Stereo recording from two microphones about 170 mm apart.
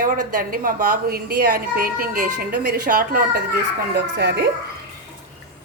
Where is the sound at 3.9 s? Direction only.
75° right (ahead or behind).